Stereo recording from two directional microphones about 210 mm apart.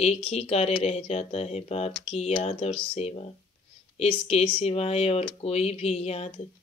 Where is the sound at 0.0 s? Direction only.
30° left (ahead or behind).